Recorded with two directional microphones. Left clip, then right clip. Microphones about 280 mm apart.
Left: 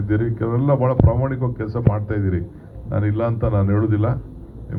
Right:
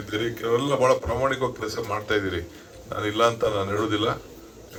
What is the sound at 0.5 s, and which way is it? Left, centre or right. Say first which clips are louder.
A man's voice: even; right.